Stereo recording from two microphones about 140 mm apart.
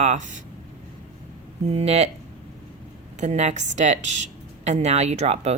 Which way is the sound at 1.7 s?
50° right (ahead or behind).